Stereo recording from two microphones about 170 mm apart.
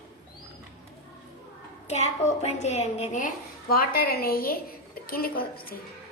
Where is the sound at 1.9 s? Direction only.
40° left (ahead or behind).